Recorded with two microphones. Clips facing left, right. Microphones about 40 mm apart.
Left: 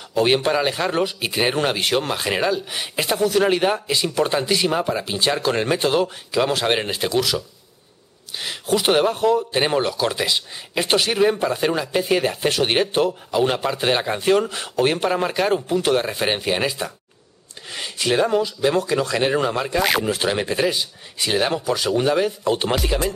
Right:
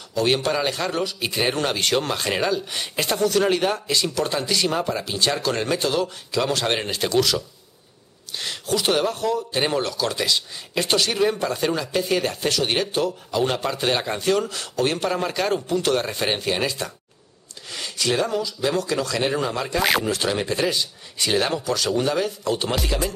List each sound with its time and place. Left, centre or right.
0.1 s a man's voice: left; by 7.4 s centre
8.4 s a sound: centre
8.7 s a man's voice: left
13.4 s a man's voice: centre
19.8 s speech: centre
20.1 s a man's voice: centre